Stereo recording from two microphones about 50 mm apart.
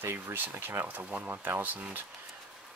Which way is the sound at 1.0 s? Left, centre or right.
Right.